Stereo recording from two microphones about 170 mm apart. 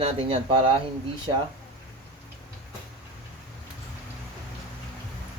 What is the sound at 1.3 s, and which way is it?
Speech, 25° right (ahead or behind).